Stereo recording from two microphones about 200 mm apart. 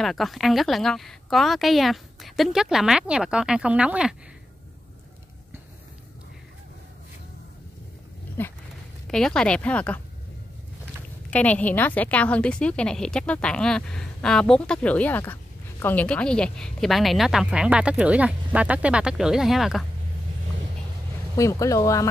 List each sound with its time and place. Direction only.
0.0 s speech: centre (ahead or behind)
8.4 s speech: 10° left (ahead or behind)
11.2 s speech: 5° left (ahead or behind)
21.4 s speech: 15° left (ahead or behind)